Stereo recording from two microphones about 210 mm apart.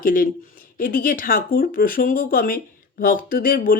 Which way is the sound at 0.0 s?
40° left (ahead or behind).